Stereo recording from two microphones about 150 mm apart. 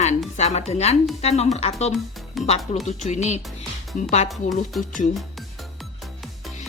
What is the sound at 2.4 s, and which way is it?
Speech, centre (ahead or behind).